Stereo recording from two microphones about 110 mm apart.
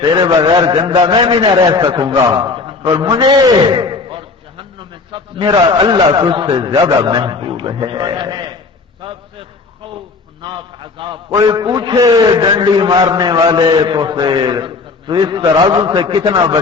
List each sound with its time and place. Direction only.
0.2 s a man's voice: 40° right (ahead or behind)
9.0 s a sound: 50° right (ahead or behind)
10.4 s a man's voice: 50° right (ahead or behind)
11.3 s a man's voice: 35° right (ahead or behind)
11.6 s a man's voice: 45° right (ahead or behind)